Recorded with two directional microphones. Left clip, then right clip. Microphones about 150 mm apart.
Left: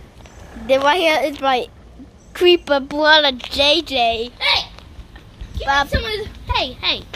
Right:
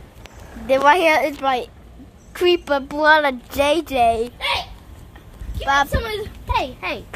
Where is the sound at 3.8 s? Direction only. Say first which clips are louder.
Right 1 dB; 10° right (ahead or behind).